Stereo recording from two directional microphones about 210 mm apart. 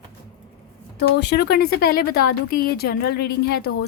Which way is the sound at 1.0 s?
55° left (ahead or behind).